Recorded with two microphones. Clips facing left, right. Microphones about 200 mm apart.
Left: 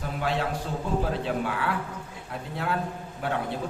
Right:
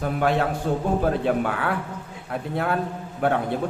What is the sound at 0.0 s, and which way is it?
A man's voice, 55° right (ahead or behind).